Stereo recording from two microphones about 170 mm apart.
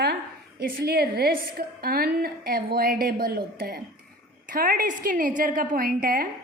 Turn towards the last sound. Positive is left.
turn(degrees=-55)  # may be behind; listen again after turning